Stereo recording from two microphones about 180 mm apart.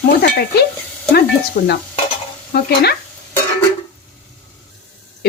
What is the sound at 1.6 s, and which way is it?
Dishes, 55° left (ahead or behind).